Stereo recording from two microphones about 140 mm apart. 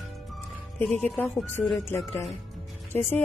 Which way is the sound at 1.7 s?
15° left (ahead or behind).